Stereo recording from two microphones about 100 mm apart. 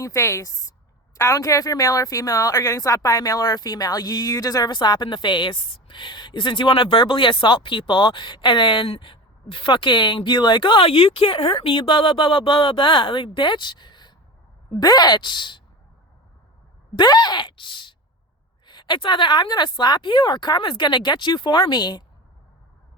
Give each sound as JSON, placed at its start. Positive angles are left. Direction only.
{"t": 0.0, "sound": "a woman's voice", "side_deg": 30}
{"t": 16.9, "sound": "a woman's voice", "side_deg": 45}